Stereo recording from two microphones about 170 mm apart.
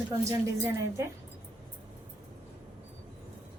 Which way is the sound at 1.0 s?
20° right (ahead or behind).